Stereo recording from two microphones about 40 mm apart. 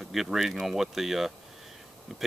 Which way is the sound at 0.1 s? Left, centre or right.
Centre.